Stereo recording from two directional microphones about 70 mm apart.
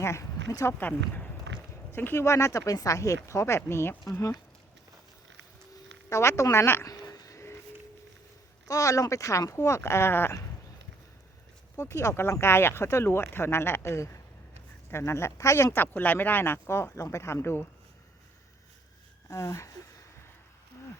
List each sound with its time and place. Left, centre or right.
0.0 s speech: left
0.7 s speech: left
1.9 s speech: left
6.1 s speech: left
6.8 s a sound: left
7.3 s a sound: left
8.6 s speech: left
11.8 s speech: left
15.7 s speech: left
19.3 s speech: left